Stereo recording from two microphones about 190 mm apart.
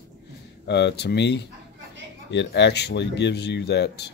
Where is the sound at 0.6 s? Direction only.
65° left (ahead or behind).